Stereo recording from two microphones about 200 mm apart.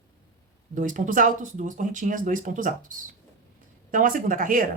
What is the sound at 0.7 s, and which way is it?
Speech, 40° right (ahead or behind).